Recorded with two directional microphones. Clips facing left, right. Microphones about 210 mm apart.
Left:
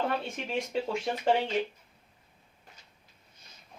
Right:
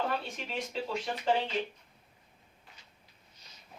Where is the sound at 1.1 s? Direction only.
25° left (ahead or behind).